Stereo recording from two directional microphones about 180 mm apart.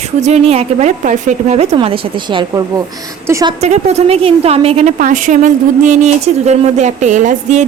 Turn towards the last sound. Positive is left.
turn(degrees=-40)  # may be behind; listen again after turning